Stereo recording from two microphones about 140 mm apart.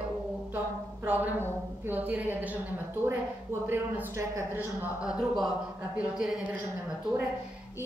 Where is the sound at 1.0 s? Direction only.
10° right (ahead or behind).